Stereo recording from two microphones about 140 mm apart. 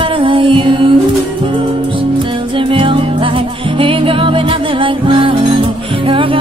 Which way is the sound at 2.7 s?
40° right (ahead or behind).